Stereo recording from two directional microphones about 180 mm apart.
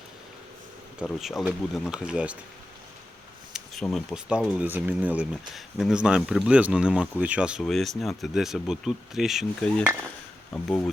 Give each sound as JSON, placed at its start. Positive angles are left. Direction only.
{"t": 0.9, "sound": "speech", "side_deg": 0}
{"t": 3.5, "sound": "a sound", "side_deg": -5}
{"t": 3.9, "sound": "speech", "side_deg": -5}